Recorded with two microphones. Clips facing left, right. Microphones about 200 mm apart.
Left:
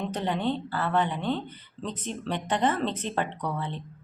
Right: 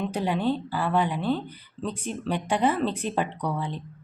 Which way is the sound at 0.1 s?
10° right (ahead or behind).